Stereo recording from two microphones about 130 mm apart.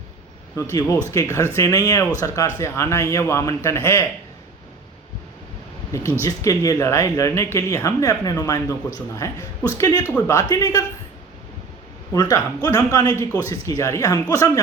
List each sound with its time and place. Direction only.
0.5 s speech: 25° left (ahead or behind)
6.2 s speech: 25° left (ahead or behind)
12.1 s speech: 30° left (ahead or behind)